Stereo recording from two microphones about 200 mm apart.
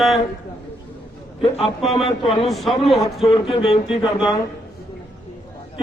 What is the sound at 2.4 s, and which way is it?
Speech, centre (ahead or behind).